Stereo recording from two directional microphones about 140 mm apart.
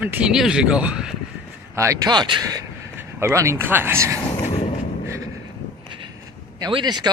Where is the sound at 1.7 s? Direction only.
25° right (ahead or behind).